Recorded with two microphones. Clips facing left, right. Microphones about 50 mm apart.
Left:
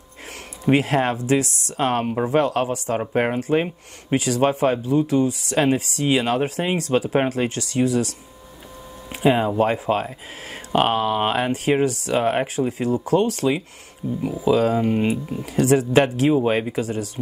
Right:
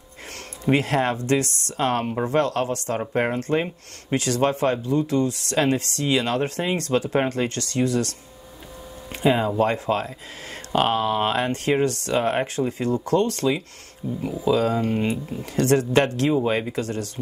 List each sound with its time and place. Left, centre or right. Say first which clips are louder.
0.7 s speech: left 2 dB; centre
11.0 s speech: left 1 dB; centre
14.0 s speech: left 3 dB; centre
14.4 s speech: left 2 dB; centre